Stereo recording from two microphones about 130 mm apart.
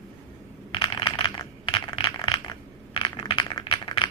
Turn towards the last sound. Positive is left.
turn(degrees=40)  # may be behind; listen again after turning